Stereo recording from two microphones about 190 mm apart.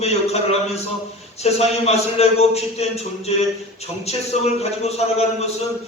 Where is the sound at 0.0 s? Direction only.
35° left (ahead or behind).